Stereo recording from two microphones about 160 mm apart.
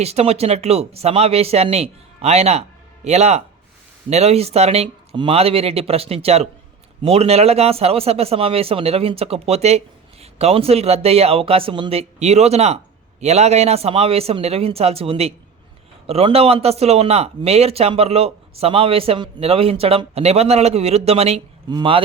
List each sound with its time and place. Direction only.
0.0 s speech: 40° right (ahead or behind)